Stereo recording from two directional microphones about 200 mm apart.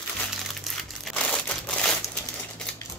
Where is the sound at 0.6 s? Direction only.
Centre (ahead or behind).